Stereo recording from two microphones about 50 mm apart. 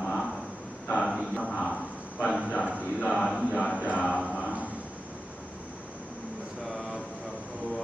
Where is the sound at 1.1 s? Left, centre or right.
Right.